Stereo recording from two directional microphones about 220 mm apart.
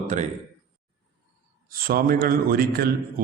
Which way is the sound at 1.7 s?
40° right (ahead or behind).